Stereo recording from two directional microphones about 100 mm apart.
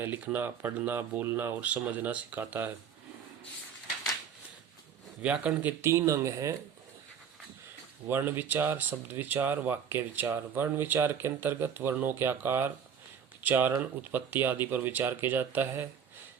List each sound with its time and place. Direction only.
0.0 s speech: 20° right (ahead or behind)
5.2 s speech: 10° right (ahead or behind); by 6.6 s 30° right (ahead or behind)
8.0 s speech: 25° right (ahead or behind)